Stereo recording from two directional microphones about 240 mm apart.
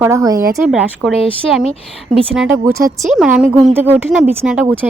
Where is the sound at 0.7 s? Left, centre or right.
Centre.